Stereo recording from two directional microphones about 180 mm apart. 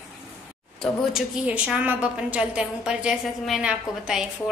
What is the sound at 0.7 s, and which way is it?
A woman's voice, 5° right (ahead or behind).